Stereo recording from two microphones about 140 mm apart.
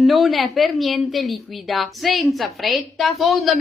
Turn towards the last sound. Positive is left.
turn(degrees=0)  # may be behind; listen again after turning